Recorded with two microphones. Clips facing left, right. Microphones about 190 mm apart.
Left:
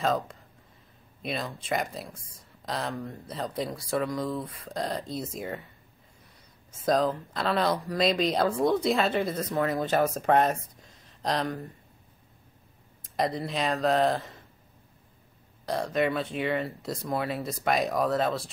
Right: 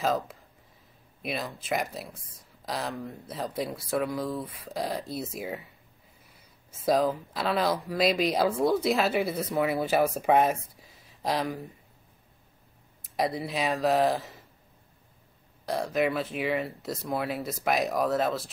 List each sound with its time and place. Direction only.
0.0 s speech: 5° right (ahead or behind)
6.8 s speech: 5° right (ahead or behind)
13.0 s speech: 5° right (ahead or behind)
15.6 s speech: centre (ahead or behind)